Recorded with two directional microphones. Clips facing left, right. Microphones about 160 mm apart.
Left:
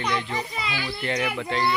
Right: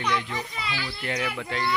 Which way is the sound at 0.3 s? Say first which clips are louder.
Left 3 dB; 15° left (ahead or behind).